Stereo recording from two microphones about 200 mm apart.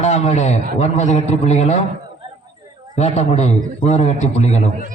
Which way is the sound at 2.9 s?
35° left (ahead or behind).